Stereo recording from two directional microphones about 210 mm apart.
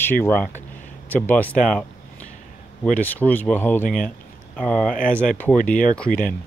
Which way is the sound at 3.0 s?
10° left (ahead or behind).